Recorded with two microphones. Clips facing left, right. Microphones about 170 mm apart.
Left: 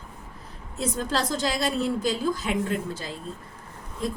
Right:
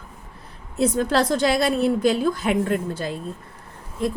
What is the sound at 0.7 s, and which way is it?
Speech, 60° right (ahead or behind).